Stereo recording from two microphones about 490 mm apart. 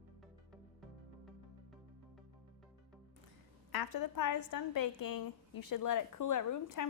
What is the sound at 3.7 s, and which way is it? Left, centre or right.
A woman's voice, left.